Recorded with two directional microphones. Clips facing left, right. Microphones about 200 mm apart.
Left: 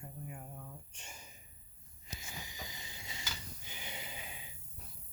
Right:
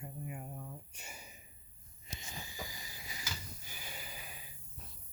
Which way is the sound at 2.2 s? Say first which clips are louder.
Right 2 dB; 15° left (ahead or behind).